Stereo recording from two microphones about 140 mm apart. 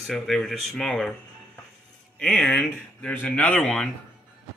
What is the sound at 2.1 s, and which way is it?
Speech, 5° left (ahead or behind).